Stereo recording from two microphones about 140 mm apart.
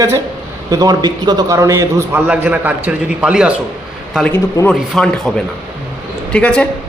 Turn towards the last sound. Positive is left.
turn(degrees=5)  # may be behind; listen again after turning